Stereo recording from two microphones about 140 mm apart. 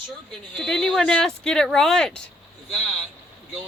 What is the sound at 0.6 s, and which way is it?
Speech, 5° left (ahead or behind).